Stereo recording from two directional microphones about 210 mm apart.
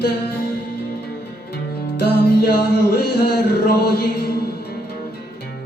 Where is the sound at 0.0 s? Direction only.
50° left (ahead or behind).